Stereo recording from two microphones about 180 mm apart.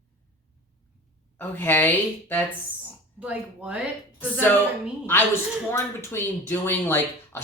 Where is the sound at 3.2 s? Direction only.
5° right (ahead or behind).